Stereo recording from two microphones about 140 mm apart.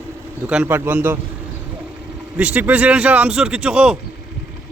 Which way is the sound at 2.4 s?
10° right (ahead or behind).